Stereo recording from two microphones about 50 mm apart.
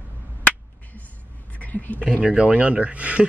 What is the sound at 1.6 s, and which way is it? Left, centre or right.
Speech, left.